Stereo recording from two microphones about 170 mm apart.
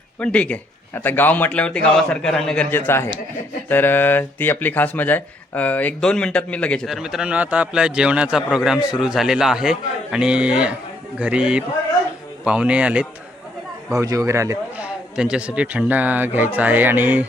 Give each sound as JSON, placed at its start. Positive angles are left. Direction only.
{"t": 0.2, "sound": "a man's voice", "side_deg": 5}
{"t": 13.9, "sound": "speech", "side_deg": -20}
{"t": 14.8, "sound": "speech", "side_deg": -5}